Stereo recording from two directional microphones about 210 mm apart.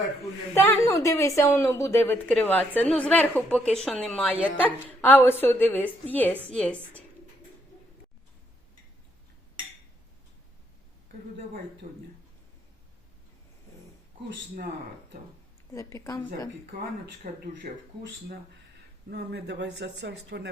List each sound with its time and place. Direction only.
0.5 s a woman's voice: 10° left (ahead or behind)
11.8 s speech: 45° right (ahead or behind)
15.7 s a woman's voice: 15° left (ahead or behind)
17.2 s speech: 40° right (ahead or behind)
19.1 s speech: 55° right (ahead or behind)